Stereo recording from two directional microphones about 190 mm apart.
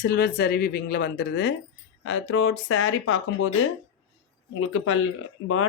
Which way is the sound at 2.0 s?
90° left.